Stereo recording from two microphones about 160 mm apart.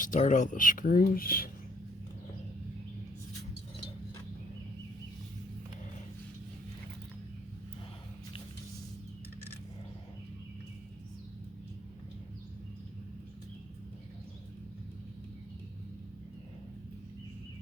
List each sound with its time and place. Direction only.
0.0 s speech: 50° left (ahead or behind)